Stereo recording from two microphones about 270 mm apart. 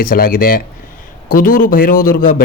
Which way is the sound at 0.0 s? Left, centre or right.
Left.